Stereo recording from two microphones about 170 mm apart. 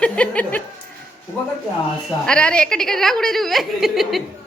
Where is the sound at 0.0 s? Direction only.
10° left (ahead or behind).